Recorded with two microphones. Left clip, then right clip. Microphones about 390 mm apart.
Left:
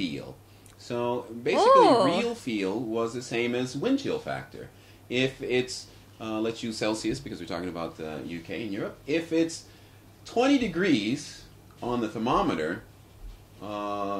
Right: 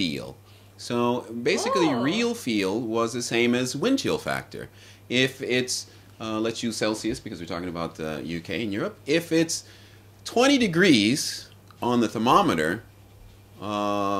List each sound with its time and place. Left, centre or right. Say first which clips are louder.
0.7 s speech: right 4 dB; right